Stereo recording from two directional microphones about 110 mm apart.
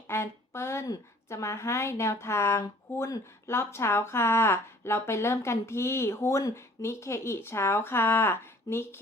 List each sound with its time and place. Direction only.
0.1 s a woman's voice: 25° left (ahead or behind)